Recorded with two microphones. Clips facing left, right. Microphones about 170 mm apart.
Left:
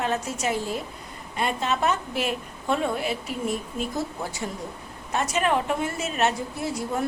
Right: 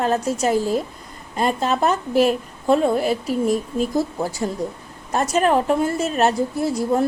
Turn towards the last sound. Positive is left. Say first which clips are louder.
# right 8 dB
turn(degrees=-35)  # may be behind; listen again after turning